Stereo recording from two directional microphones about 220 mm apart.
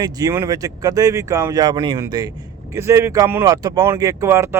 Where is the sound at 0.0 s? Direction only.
15° right (ahead or behind).